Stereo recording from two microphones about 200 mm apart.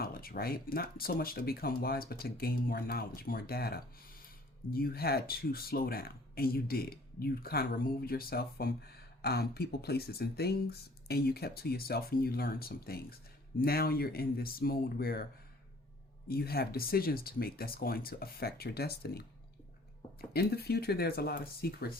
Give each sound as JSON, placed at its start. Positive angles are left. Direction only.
{"t": 0.0, "sound": "speech", "side_deg": 50}
{"t": 16.3, "sound": "speech", "side_deg": 50}
{"t": 20.3, "sound": "speech", "side_deg": 50}